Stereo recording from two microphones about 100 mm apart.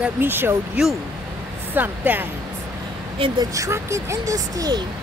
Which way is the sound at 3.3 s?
35° right (ahead or behind).